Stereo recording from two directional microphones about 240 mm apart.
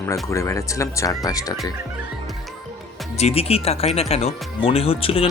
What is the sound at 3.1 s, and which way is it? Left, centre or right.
Speech, left.